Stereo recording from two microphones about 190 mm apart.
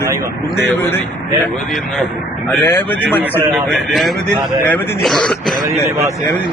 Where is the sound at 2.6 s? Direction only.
10° left (ahead or behind).